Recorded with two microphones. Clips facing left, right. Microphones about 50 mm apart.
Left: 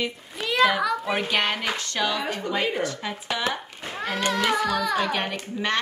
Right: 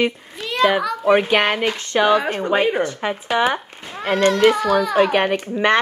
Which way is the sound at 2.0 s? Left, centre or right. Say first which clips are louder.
Right 12 dB; right.